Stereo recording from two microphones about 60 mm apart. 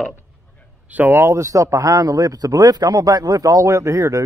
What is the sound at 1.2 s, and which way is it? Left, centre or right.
A man's voice, right.